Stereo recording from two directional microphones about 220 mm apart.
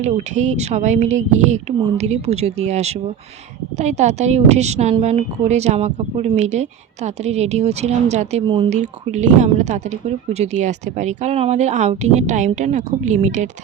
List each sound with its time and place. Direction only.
0.0 s a woman's voice: 30° right (ahead or behind)